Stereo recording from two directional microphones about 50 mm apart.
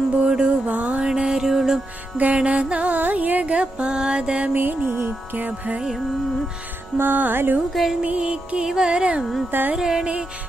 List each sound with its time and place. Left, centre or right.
0.2 s music: centre
1.0 s music: centre
2.1 s music: right
3.5 s music: centre
4.6 s music: right
5.0 s speech: right
7.0 s speech: right
7.7 s music: centre
8.0 s music: right